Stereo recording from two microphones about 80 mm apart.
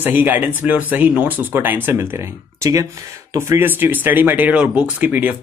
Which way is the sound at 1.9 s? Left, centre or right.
Right.